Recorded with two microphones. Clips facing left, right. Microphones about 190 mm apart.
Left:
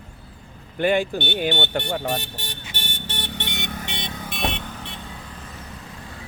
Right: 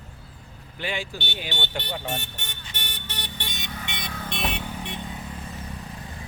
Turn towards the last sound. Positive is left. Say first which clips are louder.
# even
turn(degrees=-10)  # may be behind; listen again after turning